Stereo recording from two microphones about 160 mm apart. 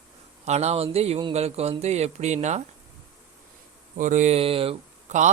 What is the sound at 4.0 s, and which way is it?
Speech, 55° right (ahead or behind).